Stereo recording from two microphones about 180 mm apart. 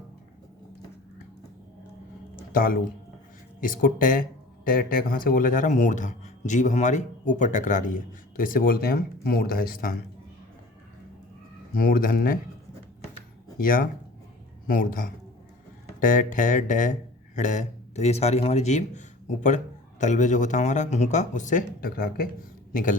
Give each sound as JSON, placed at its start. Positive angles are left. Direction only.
{"t": 2.5, "sound": "speech", "side_deg": 50}
{"t": 11.7, "sound": "speech", "side_deg": 50}
{"t": 13.6, "sound": "a man's voice", "side_deg": 50}